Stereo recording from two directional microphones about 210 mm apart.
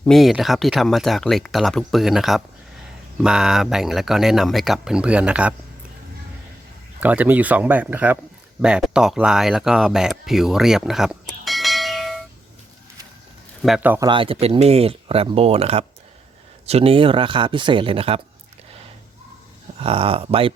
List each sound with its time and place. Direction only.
0.0 s speech: centre (ahead or behind)
7.0 s speech: 10° right (ahead or behind)
13.6 s speech: centre (ahead or behind)
14.1 s speech: 25° right (ahead or behind)
19.8 s speech: 25° right (ahead or behind)